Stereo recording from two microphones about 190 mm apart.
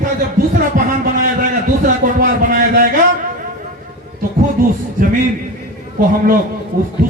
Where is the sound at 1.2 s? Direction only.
45° right (ahead or behind).